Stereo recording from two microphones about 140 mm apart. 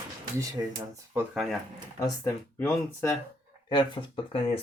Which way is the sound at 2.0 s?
20° left (ahead or behind).